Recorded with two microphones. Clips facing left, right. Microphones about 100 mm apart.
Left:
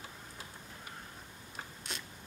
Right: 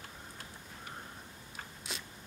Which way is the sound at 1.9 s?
Centre (ahead or behind).